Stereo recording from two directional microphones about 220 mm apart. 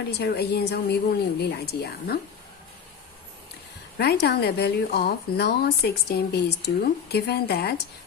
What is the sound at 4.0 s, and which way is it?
A woman's voice, 45° left (ahead or behind).